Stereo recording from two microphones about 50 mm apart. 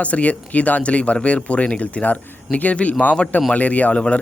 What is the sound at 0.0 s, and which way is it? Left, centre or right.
A man's voice, left.